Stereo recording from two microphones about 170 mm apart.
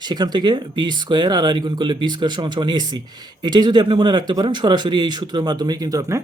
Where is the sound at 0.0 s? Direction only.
25° right (ahead or behind).